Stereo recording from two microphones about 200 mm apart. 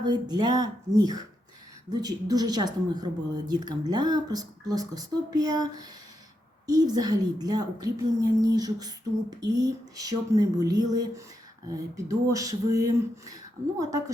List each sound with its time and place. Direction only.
0.0 s a woman's voice: 20° right (ahead or behind)